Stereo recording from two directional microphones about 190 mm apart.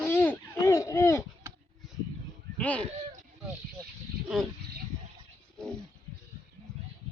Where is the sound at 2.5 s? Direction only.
5° left (ahead or behind).